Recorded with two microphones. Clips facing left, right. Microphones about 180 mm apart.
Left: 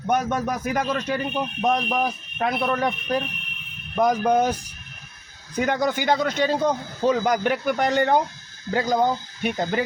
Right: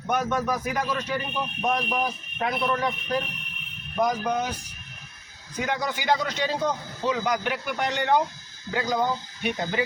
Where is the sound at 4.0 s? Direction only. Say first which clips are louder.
Left 6 dB; 50° left (ahead or behind).